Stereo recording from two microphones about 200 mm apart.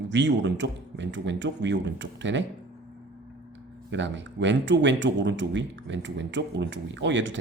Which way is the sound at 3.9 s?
65° right (ahead or behind).